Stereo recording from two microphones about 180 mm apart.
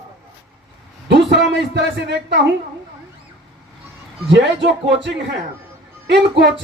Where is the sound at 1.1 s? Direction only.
75° right (ahead or behind).